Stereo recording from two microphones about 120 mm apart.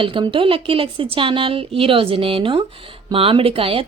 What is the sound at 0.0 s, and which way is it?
Speech, 45° right (ahead or behind).